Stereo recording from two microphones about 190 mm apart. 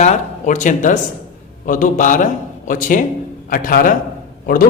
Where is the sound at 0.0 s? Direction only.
40° left (ahead or behind).